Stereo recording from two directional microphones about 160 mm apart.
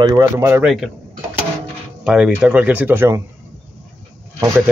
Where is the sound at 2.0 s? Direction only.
5° right (ahead or behind).